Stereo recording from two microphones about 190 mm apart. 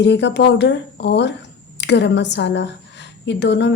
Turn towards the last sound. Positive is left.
turn(degrees=65)  # may be behind; listen again after turning